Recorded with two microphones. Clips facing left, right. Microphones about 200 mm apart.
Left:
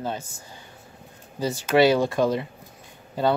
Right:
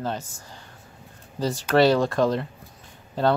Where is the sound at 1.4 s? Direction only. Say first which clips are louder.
Even; 5° left (ahead or behind).